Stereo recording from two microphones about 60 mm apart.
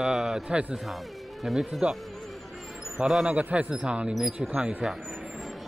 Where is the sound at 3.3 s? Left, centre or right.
Right.